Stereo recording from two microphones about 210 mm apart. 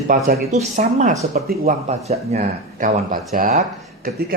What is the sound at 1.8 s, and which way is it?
Speech, 30° right (ahead or behind).